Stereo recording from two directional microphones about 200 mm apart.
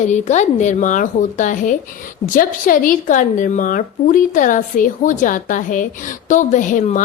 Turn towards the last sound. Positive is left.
turn(degrees=40)  # may be behind; listen again after turning